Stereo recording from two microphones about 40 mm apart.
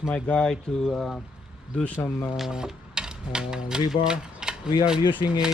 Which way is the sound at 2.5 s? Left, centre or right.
Centre.